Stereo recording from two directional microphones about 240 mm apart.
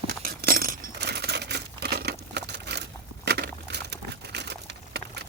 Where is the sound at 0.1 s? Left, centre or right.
Right.